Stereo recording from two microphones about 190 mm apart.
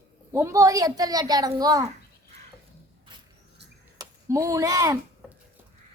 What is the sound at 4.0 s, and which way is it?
Speech, 15° right (ahead or behind).